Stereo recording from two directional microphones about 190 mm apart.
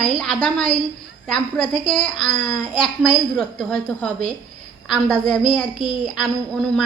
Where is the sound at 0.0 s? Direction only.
5° left (ahead or behind).